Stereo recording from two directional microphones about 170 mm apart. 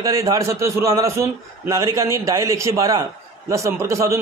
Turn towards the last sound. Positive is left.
turn(degrees=-15)  # may be behind; listen again after turning